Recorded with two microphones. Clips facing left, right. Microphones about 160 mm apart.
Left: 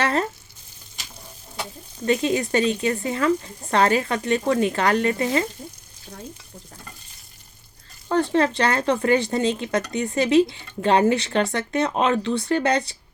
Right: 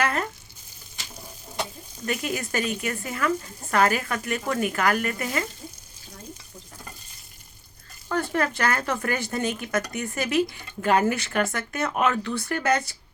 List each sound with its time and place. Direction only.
0.0 s frying: 30° left (ahead or behind)
2.0 s speech: 25° left (ahead or behind)
8.1 s speech: 25° left (ahead or behind)